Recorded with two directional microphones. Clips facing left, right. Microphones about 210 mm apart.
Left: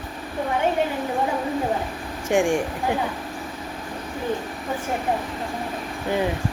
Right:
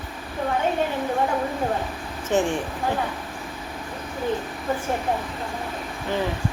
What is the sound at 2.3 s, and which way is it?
Speech, 10° left (ahead or behind).